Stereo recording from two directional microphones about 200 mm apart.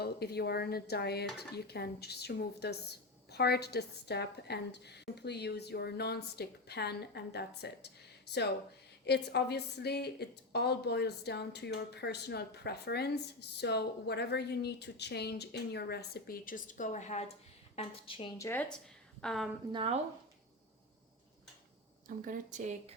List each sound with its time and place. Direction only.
0.0 s a woman's voice: 55° left (ahead or behind)
9.0 s a woman's voice: 55° left (ahead or behind); by 18.3 s 25° left (ahead or behind)
18.3 s a woman's voice: 10° left (ahead or behind)
19.7 s speech: 25° right (ahead or behind)
22.0 s speech: 45° right (ahead or behind)